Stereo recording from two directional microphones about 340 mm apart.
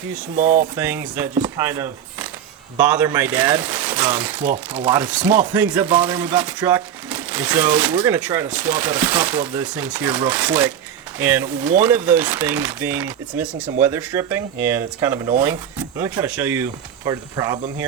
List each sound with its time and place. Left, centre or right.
0.3 s speech: right
0.8 s speech: centre